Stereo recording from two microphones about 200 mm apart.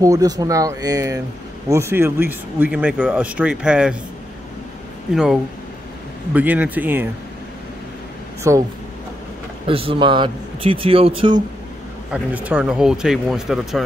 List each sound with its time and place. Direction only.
0.0 s speech: 15° right (ahead or behind)
5.1 s speech: 5° right (ahead or behind)
8.5 s speech: 15° right (ahead or behind)
9.7 s speech: 25° right (ahead or behind)
12.1 s speech: 5° right (ahead or behind)